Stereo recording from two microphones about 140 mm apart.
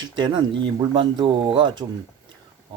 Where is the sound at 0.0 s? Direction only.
30° right (ahead or behind).